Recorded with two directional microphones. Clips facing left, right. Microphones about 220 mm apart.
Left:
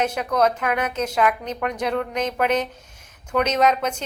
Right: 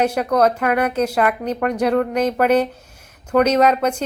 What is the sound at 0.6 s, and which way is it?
Speech, 55° right (ahead or behind).